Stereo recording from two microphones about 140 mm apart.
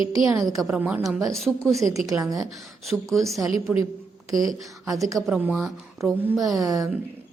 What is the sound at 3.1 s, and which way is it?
Speech, centre (ahead or behind).